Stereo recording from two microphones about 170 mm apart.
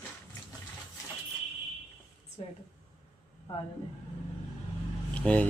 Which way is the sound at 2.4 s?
40° left (ahead or behind).